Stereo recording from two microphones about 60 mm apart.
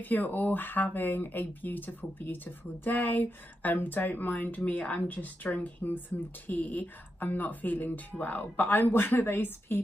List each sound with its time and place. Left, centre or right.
0.0 s speech: left